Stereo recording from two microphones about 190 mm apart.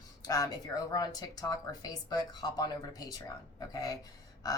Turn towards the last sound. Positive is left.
turn(degrees=20)  # may be behind; listen again after turning